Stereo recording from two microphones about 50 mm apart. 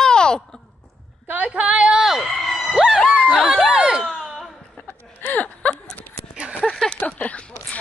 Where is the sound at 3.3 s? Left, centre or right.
Centre.